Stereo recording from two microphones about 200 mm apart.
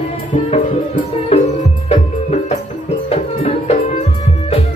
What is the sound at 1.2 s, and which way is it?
Music, 30° left (ahead or behind).